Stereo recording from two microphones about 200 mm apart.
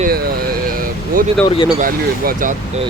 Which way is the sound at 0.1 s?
50° right (ahead or behind).